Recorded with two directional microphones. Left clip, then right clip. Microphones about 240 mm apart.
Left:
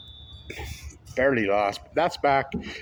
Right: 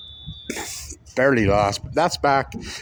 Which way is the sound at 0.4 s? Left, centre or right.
Right.